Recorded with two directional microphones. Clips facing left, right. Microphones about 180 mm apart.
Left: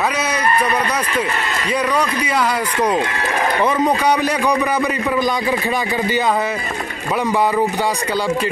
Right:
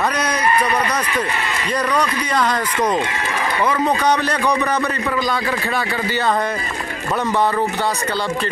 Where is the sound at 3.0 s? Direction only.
50° left (ahead or behind).